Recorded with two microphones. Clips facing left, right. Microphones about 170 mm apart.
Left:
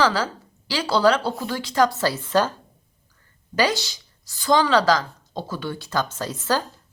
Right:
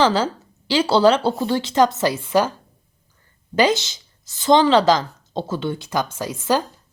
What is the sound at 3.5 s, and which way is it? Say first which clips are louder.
A woman's voice: right 4 dB; 20° right (ahead or behind).